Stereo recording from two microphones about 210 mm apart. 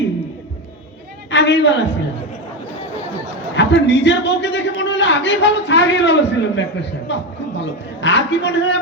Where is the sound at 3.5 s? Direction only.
55° left (ahead or behind).